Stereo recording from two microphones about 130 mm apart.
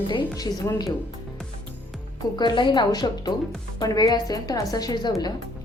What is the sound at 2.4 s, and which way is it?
A woman's voice, 35° left (ahead or behind).